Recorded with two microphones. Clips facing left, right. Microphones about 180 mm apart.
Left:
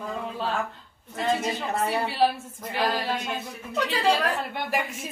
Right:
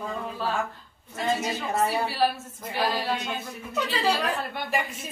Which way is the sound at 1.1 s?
5° right (ahead or behind).